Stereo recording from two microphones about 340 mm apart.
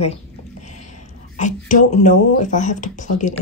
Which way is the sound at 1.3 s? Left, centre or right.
Left.